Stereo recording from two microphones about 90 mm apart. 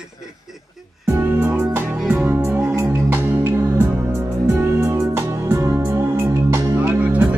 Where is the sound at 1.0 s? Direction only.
25° right (ahead or behind).